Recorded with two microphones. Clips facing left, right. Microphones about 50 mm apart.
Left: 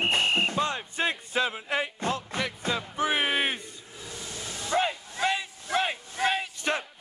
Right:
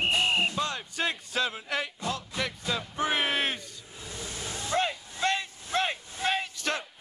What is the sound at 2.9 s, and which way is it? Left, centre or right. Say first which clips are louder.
Music: left 1 dB; centre.